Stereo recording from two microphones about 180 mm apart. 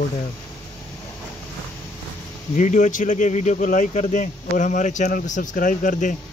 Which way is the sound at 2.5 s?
45° left (ahead or behind).